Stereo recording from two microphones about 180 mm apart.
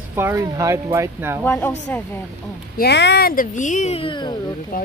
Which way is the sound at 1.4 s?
10° left (ahead or behind).